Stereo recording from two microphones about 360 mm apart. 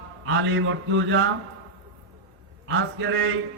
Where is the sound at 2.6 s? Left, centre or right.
Right.